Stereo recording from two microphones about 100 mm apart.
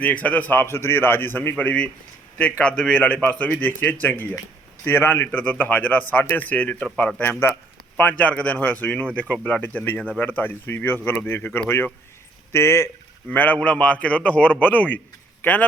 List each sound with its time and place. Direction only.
0.0 s a man's voice: 15° left (ahead or behind)